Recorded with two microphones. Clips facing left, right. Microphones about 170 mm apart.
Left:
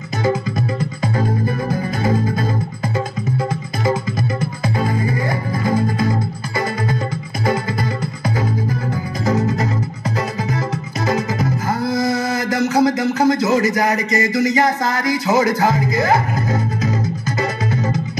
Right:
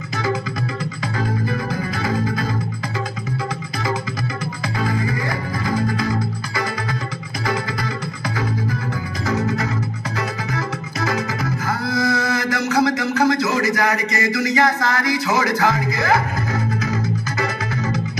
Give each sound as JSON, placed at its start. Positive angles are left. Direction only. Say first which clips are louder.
{"t": 0.6, "sound": "music", "louder": "left 4 dB", "side_deg": 45}
{"t": 4.8, "sound": "music", "louder": "even", "side_deg": 25}
{"t": 9.2, "sound": "music", "louder": "left 3 dB", "side_deg": 45}
{"t": 11.1, "sound": "music", "louder": "left 4 dB", "side_deg": 20}
{"t": 11.8, "sound": "a sound", "louder": "left 2 dB", "side_deg": 45}
{"t": 13.2, "sound": "a sound", "louder": "left 3 dB", "side_deg": 20}
{"t": 15.2, "sound": "music", "louder": "left 5 dB", "side_deg": 25}